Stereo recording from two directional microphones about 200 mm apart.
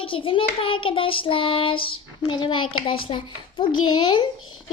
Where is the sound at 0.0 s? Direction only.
25° left (ahead or behind).